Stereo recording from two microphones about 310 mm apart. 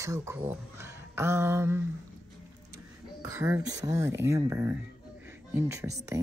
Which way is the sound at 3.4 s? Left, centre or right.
Centre.